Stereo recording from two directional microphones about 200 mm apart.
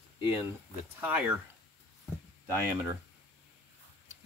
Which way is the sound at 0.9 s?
10° right (ahead or behind).